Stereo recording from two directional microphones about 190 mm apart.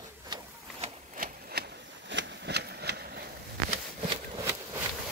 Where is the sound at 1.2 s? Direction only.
50° right (ahead or behind).